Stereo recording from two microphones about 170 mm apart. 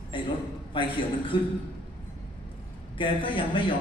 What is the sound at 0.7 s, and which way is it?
Speech, 30° left (ahead or behind).